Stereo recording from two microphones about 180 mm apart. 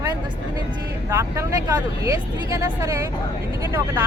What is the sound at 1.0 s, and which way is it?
Speech, 15° right (ahead or behind).